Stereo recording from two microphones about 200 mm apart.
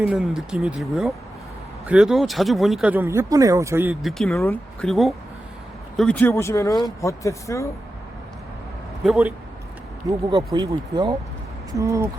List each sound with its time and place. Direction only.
0.0 s speech: 5° right (ahead or behind)
4.0 s speech: centre (ahead or behind)
9.0 s speech: centre (ahead or behind)
10.1 s speech: 20° right (ahead or behind)